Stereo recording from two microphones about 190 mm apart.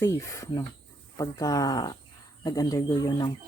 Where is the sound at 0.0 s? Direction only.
15° left (ahead or behind).